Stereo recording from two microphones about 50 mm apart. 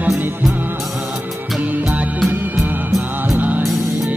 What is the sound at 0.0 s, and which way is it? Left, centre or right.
Music, right.